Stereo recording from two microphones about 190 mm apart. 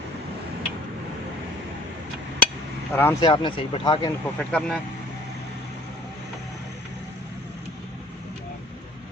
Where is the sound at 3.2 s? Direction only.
25° left (ahead or behind).